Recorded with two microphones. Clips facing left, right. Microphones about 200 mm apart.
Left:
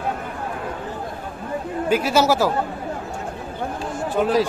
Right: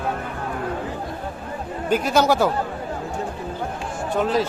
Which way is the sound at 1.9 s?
5° left (ahead or behind).